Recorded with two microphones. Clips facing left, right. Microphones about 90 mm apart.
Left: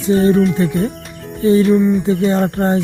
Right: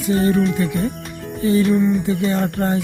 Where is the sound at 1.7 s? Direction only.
5° left (ahead or behind).